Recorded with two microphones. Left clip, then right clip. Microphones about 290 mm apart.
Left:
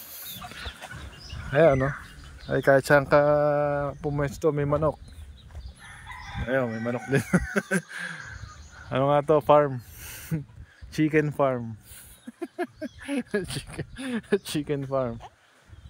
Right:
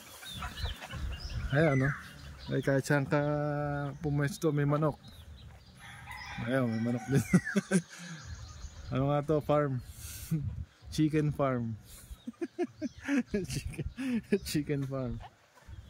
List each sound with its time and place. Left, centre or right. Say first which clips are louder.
1.5 s speech: left 9 dB; centre
2.5 s speech: left 11 dB; left
3.1 s speech: left 12 dB; centre
6.5 s speech: left 6 dB; centre
9.6 s a sound: left 9 dB; centre
11.0 s speech: left 7 dB; centre
13.7 s speech: left 3 dB; left
14.5 s speech: left 6 dB; centre